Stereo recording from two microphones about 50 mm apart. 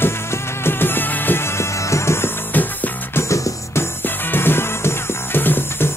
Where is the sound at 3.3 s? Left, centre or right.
Left.